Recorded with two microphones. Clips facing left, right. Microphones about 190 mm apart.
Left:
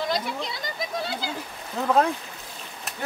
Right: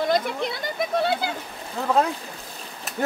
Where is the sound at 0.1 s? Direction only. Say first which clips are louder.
Right 5 dB; 55° right (ahead or behind).